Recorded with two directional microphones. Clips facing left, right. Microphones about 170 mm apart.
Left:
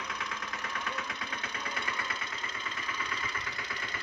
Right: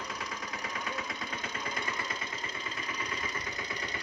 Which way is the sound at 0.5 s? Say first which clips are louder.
Right 2 dB; 15° right (ahead or behind).